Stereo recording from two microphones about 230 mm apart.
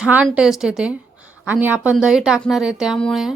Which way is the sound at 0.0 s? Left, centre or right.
Centre.